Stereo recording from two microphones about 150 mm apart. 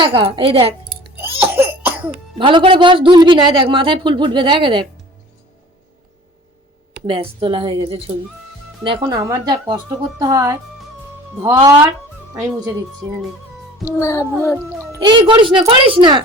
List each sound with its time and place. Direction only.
0.0 s speech: 35° right (ahead or behind)
1.4 s cough: 15° right (ahead or behind)
2.4 s speech: 35° right (ahead or behind)
7.0 s speech: 40° right (ahead or behind); by 11.9 s 20° right (ahead or behind)
14.0 s a sound: 20° left (ahead or behind)
15.0 s speech: 30° right (ahead or behind)